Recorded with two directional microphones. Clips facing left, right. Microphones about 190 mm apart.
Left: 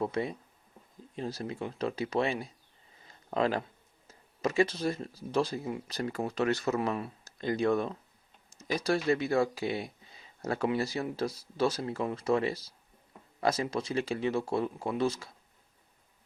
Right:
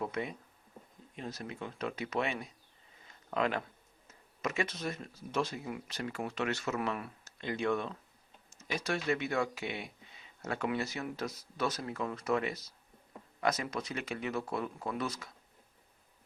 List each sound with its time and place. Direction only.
0.0 s speech: 35° left (ahead or behind)
3.1 s a sound: 35° left (ahead or behind)
4.1 s speech: 30° left (ahead or behind)